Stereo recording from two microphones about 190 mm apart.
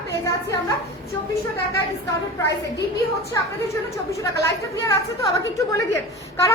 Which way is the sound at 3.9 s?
15° left (ahead or behind).